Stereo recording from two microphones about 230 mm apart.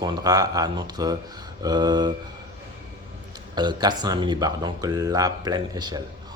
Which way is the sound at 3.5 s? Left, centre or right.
Centre.